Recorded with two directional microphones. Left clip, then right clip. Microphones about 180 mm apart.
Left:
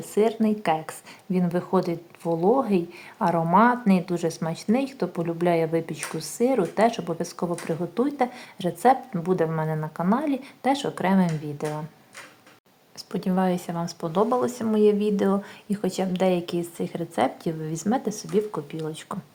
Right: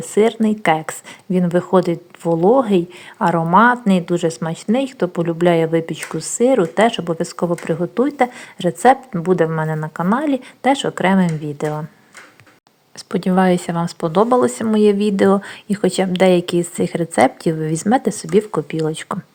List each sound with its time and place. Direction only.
0.0 s speech: 25° right (ahead or behind)
13.1 s speech: 25° right (ahead or behind)